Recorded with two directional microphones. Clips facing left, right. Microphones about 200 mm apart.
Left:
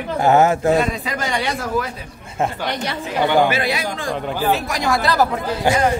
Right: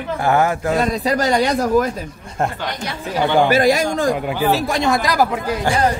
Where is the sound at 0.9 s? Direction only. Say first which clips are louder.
Right 6 dB; 40° right (ahead or behind).